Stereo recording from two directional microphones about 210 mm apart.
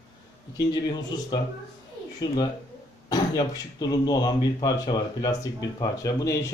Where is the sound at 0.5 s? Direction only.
20° left (ahead or behind).